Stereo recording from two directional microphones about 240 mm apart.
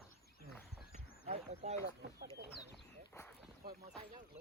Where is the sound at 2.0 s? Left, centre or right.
Right.